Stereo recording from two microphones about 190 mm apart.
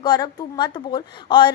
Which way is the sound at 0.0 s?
20° left (ahead or behind).